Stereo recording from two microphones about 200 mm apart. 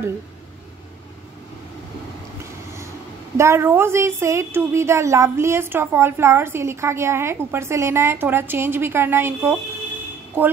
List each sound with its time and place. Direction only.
3.3 s a woman's voice: 15° right (ahead or behind)